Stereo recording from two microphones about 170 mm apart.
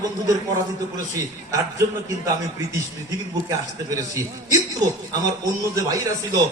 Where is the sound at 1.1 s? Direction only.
20° right (ahead or behind).